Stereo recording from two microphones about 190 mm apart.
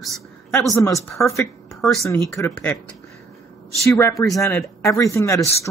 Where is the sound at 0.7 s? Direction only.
15° left (ahead or behind).